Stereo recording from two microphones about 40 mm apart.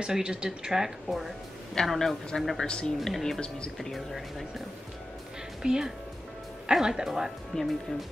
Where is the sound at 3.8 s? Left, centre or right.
Centre.